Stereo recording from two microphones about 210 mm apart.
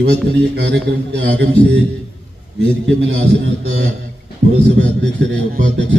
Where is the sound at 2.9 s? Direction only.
65° right (ahead or behind).